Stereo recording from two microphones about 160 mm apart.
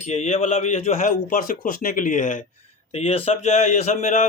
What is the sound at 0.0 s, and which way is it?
Speech, 45° left (ahead or behind).